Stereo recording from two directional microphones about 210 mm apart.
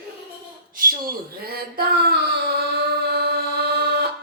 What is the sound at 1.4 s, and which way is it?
Speech, 45° right (ahead or behind).